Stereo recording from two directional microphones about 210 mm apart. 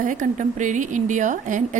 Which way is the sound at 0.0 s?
40° right (ahead or behind).